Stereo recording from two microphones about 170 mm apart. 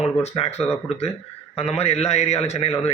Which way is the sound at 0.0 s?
40° left (ahead or behind).